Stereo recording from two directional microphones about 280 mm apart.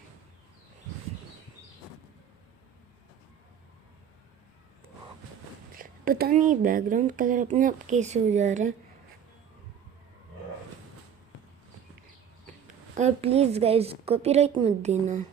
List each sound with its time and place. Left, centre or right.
5.7 s speech: right
13.0 s speech: right